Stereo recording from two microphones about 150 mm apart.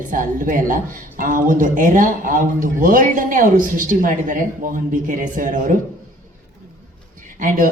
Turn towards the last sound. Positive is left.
turn(degrees=-65)  # may be behind; listen again after turning